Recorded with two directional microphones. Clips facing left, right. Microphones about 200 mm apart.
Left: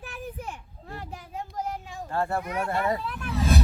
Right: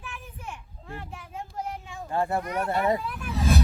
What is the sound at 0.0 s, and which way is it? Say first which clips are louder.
Children playing: left 5 dB; 35° left (ahead or behind).